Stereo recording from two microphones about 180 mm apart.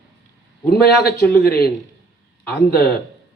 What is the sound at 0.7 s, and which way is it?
A man's voice, 60° left (ahead or behind).